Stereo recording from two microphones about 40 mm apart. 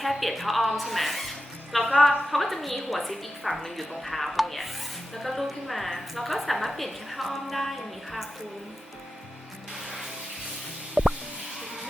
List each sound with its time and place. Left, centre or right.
0.0 s speech: centre
11.0 s music: centre